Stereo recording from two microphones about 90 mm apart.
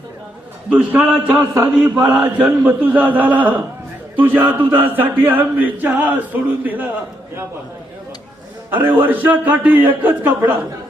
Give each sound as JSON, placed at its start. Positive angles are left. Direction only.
{"t": 0.7, "sound": "a man's voice", "side_deg": -15}
{"t": 2.2, "sound": "chant", "side_deg": -20}
{"t": 8.7, "sound": "chant", "side_deg": -20}